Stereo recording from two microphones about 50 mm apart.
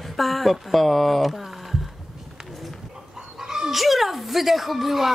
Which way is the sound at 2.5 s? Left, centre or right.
Centre.